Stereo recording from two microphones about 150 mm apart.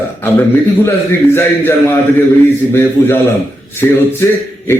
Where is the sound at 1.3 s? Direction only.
15° left (ahead or behind).